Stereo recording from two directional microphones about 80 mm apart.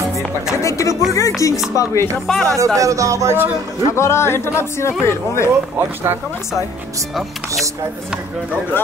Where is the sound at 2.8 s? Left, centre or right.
Right.